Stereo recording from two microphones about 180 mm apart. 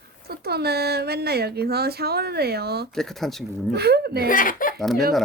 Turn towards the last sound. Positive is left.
turn(degrees=0)  # may be behind; listen again after turning